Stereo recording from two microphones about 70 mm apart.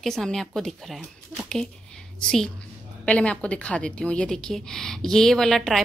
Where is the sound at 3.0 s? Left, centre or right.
Centre.